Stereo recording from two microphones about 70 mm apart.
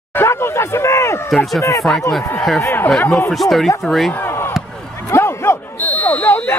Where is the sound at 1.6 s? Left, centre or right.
Left.